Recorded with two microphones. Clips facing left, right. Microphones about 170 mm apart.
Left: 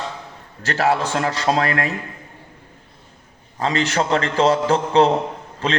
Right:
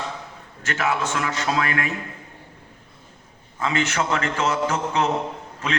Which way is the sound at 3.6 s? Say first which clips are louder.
Left 3 dB; 35° left (ahead or behind).